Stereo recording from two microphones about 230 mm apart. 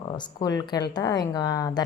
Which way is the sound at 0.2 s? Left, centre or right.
Centre.